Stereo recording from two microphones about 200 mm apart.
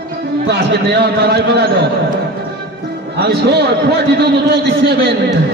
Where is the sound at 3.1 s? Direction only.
55° right (ahead or behind).